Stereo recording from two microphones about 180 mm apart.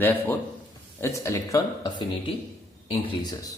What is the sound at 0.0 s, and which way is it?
Speech, 10° left (ahead or behind).